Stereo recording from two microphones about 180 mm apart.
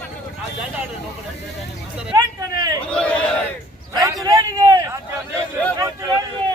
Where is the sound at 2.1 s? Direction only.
20° right (ahead or behind).